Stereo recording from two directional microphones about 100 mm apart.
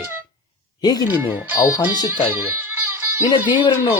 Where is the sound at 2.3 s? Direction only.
20° right (ahead or behind).